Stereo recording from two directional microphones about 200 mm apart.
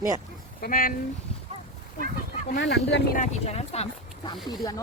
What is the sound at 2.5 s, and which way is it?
Speech, 55° left (ahead or behind).